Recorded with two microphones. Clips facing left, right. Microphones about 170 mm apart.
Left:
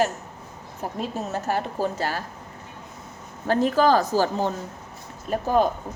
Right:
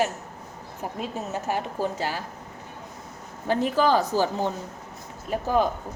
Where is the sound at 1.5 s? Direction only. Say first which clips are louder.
Left 2 dB; 15° right (ahead or behind).